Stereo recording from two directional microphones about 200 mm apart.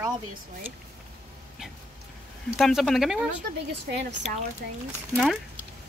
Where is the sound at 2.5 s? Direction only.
Centre (ahead or behind).